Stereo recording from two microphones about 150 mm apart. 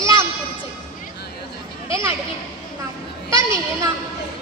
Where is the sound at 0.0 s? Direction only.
20° right (ahead or behind).